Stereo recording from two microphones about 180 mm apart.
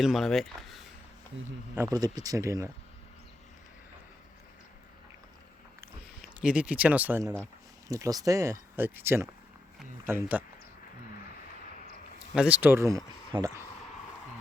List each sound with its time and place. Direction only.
0.0 s speech: centre (ahead or behind)
1.7 s speech: 15° right (ahead or behind)
6.4 s speech: 5° right (ahead or behind)
12.3 s speech: 5° right (ahead or behind)